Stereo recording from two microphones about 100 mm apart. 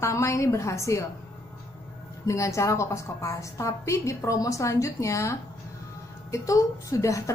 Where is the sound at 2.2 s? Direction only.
30° left (ahead or behind).